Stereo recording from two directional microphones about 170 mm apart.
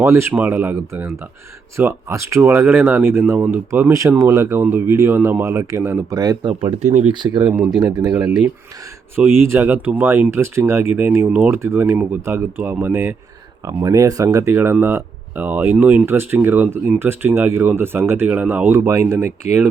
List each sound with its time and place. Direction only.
0.0 s speech: 15° right (ahead or behind)
6.8 s speech: 45° right (ahead or behind)
7.6 s speech: 5° right (ahead or behind)
7.9 s speech: 20° right (ahead or behind)